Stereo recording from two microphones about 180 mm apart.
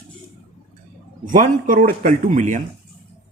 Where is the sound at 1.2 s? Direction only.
45° right (ahead or behind).